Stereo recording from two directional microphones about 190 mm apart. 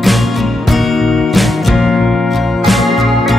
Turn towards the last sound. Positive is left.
turn(degrees=0)  # may be behind; listen again after turning